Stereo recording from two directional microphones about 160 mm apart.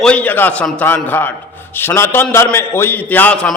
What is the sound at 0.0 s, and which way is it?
A man's voice, 10° left (ahead or behind).